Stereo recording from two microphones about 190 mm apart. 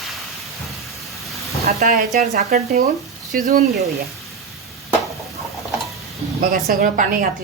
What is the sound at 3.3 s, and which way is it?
Speech, 45° right (ahead or behind).